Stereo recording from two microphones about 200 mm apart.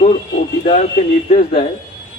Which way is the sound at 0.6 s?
35° left (ahead or behind).